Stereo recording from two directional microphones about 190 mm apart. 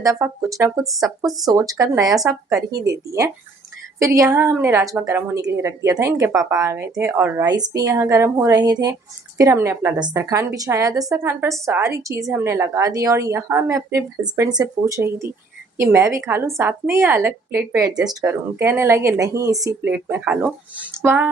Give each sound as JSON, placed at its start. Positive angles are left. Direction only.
{"t": 0.0, "sound": "a woman's voice", "side_deg": -15}